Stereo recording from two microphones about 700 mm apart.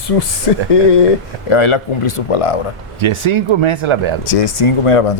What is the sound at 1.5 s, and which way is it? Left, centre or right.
Speech, left.